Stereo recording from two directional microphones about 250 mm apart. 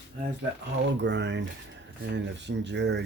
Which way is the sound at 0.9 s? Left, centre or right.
Right.